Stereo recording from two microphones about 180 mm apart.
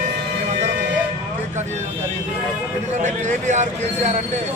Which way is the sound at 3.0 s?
40° right (ahead or behind).